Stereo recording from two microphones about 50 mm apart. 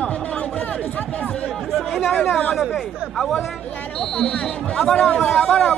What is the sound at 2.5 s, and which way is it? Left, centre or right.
Speech, centre.